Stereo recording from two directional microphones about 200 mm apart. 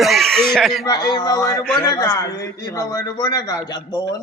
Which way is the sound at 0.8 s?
20° left (ahead or behind).